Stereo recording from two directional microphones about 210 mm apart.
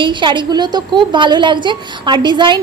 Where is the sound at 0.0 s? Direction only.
20° right (ahead or behind).